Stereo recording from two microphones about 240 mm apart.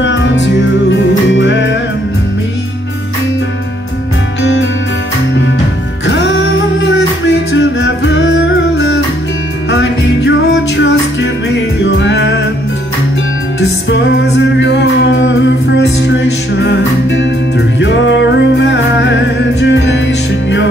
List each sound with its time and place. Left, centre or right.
0.0 s music: left
4.4 s music: left
6.0 s music: left
13.6 s music: left